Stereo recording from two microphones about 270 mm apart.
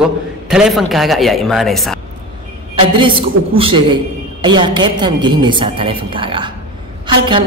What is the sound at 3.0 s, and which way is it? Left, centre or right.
A man's voice, centre.